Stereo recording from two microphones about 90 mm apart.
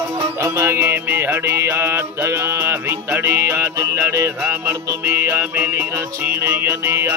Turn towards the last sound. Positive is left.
turn(degrees=-25)  # may be behind; listen again after turning